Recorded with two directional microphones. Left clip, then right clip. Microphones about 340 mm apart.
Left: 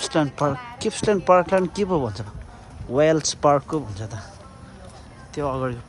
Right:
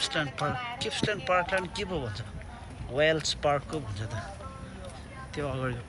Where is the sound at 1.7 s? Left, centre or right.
Centre.